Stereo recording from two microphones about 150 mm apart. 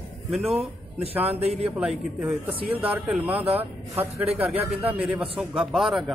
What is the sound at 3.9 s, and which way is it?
Speech, 40° right (ahead or behind).